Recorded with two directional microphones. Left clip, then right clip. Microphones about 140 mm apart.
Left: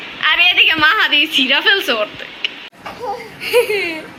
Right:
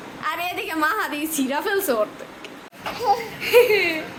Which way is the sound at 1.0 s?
15° right (ahead or behind).